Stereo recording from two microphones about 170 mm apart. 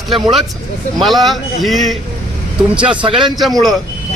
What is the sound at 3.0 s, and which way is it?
Speech, 25° right (ahead or behind).